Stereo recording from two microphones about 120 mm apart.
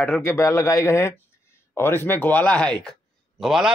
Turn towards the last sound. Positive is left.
turn(degrees=-5)  # may be behind; listen again after turning